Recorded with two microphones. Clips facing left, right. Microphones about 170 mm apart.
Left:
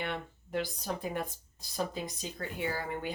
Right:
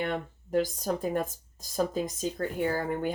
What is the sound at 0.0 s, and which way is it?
Speech, 45° right (ahead or behind).